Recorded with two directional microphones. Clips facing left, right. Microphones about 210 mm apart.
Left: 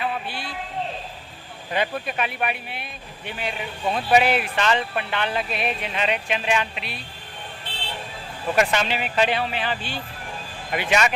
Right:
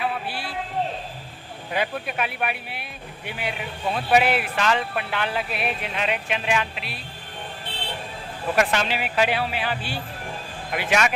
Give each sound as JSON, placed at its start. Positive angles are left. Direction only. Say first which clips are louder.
{"t": 0.0, "sound": "a sound", "louder": "even", "side_deg": -5}
{"t": 1.7, "sound": "a man's voice", "louder": "left 1 dB", "side_deg": -5}
{"t": 8.5, "sound": "a man's voice", "louder": "left 1 dB", "side_deg": 0}